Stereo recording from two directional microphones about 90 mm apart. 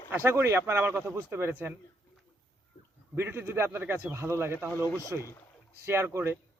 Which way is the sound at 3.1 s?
25° right (ahead or behind).